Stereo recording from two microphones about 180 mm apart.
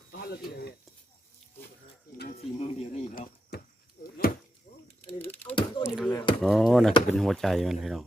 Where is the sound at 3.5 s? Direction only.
60° left (ahead or behind).